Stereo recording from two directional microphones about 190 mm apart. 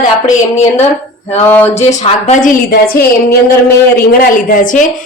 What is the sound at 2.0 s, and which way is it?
Speech, 35° left (ahead or behind).